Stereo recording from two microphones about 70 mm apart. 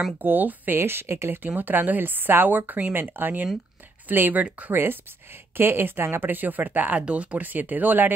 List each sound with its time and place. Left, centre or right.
0.2 s speech: right
1.4 s speech: right